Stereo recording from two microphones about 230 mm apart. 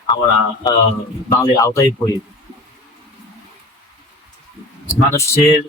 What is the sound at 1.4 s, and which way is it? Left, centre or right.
Speech, centre.